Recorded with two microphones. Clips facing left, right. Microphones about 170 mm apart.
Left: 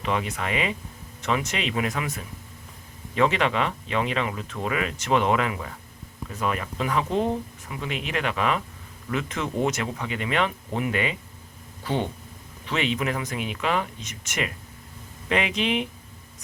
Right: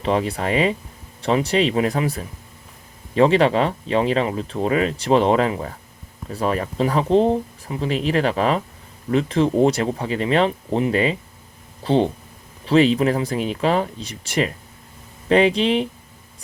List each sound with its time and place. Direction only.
0.0 s speech: 35° right (ahead or behind)